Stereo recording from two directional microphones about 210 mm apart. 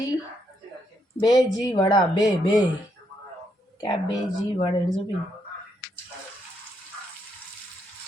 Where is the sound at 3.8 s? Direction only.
20° left (ahead or behind).